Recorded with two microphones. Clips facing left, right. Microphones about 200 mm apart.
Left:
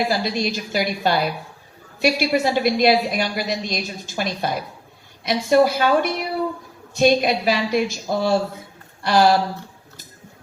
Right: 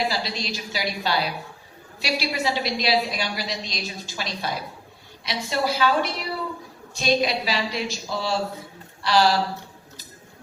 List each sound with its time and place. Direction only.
0.1 s a woman's voice: 50° left (ahead or behind)